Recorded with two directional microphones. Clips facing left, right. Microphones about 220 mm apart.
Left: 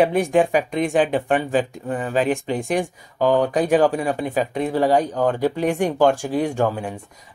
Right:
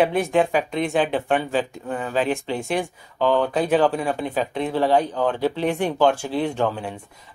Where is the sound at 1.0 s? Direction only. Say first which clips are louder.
Left 2 dB; 5° left (ahead or behind).